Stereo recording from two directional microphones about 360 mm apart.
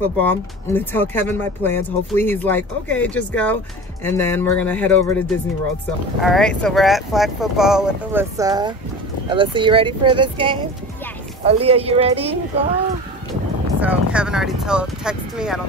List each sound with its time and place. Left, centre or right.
0.2 s a woman's voice: centre
13.7 s speech: centre